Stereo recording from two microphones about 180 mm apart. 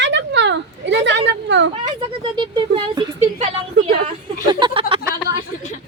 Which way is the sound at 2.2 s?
25° right (ahead or behind).